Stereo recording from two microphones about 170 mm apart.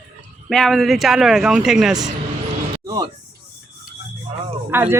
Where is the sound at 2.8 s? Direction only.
20° right (ahead or behind).